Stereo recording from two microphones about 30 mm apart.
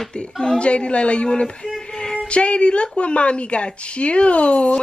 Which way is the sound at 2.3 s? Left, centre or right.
Left.